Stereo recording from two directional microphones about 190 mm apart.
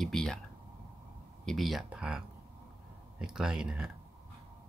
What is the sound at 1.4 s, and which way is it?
Speech, centre (ahead or behind).